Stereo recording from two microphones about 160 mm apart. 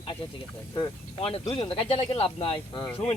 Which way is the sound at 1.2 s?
35° left (ahead or behind).